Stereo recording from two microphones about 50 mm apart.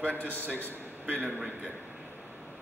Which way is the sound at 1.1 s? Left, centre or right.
Right.